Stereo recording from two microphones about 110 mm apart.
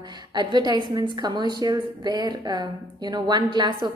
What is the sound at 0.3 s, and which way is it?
A woman's voice, 40° right (ahead or behind).